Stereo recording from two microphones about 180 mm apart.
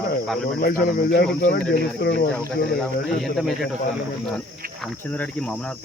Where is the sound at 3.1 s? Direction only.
Centre (ahead or behind).